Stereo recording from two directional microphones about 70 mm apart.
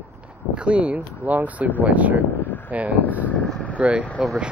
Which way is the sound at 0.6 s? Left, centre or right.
Centre.